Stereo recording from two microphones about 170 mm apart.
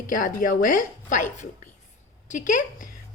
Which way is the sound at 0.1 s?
55° left (ahead or behind).